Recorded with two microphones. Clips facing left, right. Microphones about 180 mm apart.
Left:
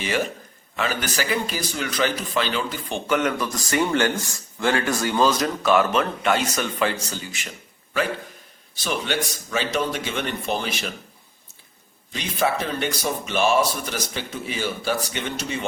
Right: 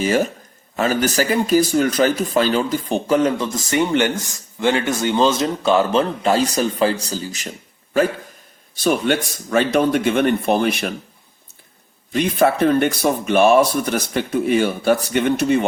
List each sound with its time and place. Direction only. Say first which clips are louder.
0.0 s speech: right 7 dB; 40° right (ahead or behind)
8.7 s speech: right 8 dB; 50° right (ahead or behind)
12.1 s speech: right 7 dB; 55° right (ahead or behind)